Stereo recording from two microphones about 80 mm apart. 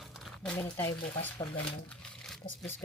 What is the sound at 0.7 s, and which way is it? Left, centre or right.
Speech, left.